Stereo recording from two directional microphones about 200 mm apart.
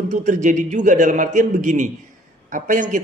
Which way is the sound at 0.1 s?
35° right (ahead or behind).